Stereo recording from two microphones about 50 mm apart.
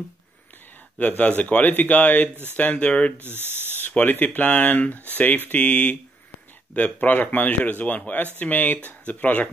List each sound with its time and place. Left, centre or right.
0.9 s speech: left
3.2 s speech: right
4.0 s speech: left